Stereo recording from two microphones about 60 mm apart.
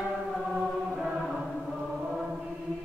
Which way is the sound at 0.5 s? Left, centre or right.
Centre.